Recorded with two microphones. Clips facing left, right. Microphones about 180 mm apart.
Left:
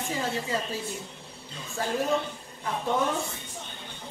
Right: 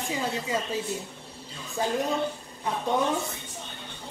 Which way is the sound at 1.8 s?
20° right (ahead or behind).